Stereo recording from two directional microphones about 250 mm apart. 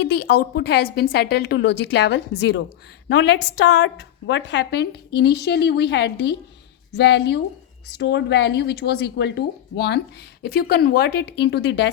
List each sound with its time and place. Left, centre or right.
0.0 s a woman's voice: left